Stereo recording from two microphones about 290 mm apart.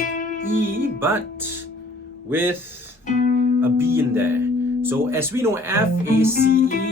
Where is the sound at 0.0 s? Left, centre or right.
Left.